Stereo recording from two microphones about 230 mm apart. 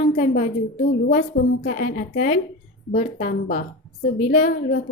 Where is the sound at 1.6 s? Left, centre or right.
Left.